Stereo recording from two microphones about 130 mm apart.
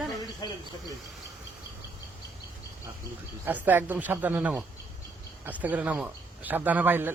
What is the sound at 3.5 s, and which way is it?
Speech, 15° right (ahead or behind).